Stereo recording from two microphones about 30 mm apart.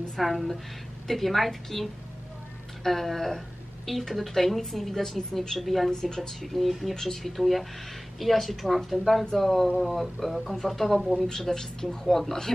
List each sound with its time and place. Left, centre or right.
0.2 s a woman's voice: centre
5.9 s speech: left
6.1 s a woman's voice: centre
6.9 s a woman's voice: centre
11.1 s speech: centre
11.5 s speech: left
12.1 s speech: centre